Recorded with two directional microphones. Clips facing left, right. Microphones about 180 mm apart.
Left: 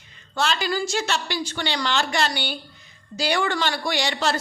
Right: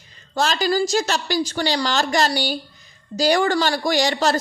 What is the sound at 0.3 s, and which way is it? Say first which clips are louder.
Speech: right 4 dB; 40° right (ahead or behind).